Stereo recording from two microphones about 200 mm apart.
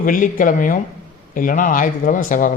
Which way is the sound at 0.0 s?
45° left (ahead or behind).